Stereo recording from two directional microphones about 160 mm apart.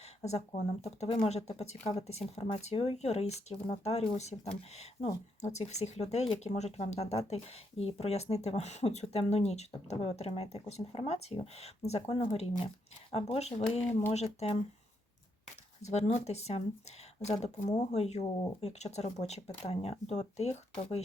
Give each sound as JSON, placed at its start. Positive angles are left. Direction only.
{"t": 0.0, "sound": "a sound", "side_deg": 40}
{"t": 0.5, "sound": "speech", "side_deg": 45}
{"t": 15.8, "sound": "speech", "side_deg": 45}